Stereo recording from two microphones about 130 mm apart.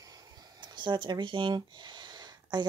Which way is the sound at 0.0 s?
30° right (ahead or behind).